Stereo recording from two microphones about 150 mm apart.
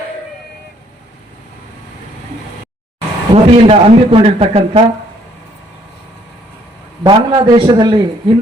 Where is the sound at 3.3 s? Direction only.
40° right (ahead or behind).